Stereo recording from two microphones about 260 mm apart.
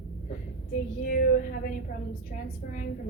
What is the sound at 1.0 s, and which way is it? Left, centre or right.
Speech, left.